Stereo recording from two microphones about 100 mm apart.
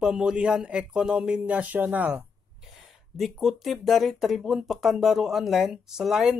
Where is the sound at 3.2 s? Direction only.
Centre (ahead or behind).